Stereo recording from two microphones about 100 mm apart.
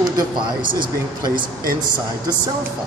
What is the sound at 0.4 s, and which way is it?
Speech, 50° right (ahead or behind).